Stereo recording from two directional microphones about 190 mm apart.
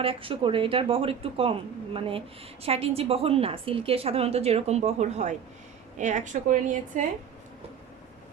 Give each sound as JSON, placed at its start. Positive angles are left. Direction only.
{"t": 0.0, "sound": "a woman's voice", "side_deg": -30}